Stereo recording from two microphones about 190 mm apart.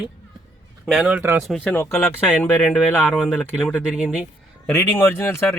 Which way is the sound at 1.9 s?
10° left (ahead or behind).